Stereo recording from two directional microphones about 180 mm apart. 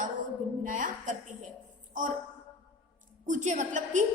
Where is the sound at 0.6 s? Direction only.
45° right (ahead or behind).